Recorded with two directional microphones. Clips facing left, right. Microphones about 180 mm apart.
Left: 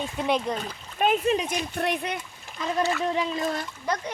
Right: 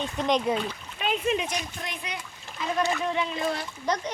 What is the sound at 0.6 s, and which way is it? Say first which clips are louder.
Speech: left 5 dB; 45° left (ahead or behind).